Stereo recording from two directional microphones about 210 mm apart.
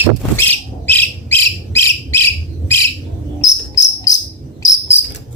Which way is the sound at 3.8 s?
15° left (ahead or behind).